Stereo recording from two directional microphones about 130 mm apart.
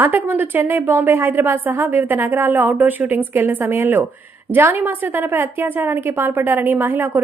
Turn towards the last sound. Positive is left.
turn(degrees=-15)  # may be behind; listen again after turning